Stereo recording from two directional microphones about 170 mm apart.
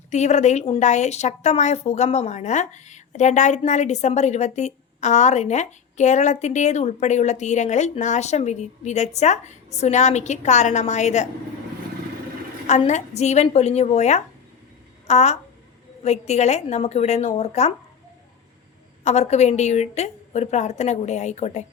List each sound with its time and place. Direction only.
0.1 s a woman's voice: 40° left (ahead or behind)
12.9 s a woman's voice: 40° left (ahead or behind)
19.0 s a woman's voice: 40° left (ahead or behind)